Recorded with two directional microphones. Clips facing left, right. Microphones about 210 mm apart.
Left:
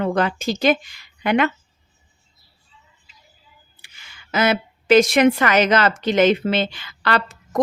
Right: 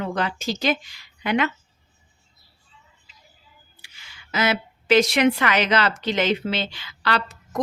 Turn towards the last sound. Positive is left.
turn(degrees=55)  # may be behind; listen again after turning